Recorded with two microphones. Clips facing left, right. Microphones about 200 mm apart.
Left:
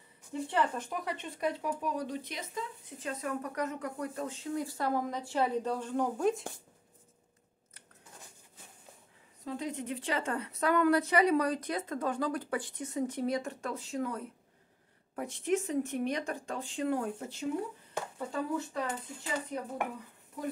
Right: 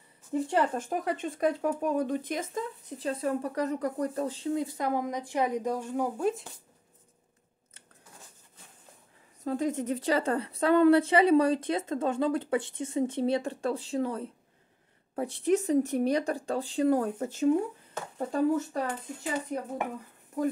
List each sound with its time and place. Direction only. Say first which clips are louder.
0.3 s speech: right 5 dB; 45° right (ahead or behind)
3.0 s speech: right 6 dB; 30° right (ahead or behind)
4.6 s a woman's voice: right 2 dB; 15° right (ahead or behind)
9.4 s a woman's voice: right 7 dB; 45° right (ahead or behind)